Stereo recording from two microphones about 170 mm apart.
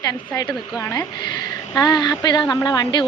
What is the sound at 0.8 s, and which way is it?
A woman's voice, 25° left (ahead or behind).